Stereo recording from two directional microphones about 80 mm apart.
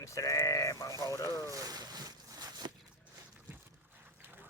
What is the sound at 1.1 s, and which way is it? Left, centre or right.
Speech, left.